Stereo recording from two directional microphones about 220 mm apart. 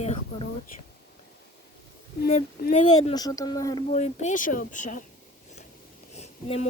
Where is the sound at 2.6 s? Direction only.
35° left (ahead or behind).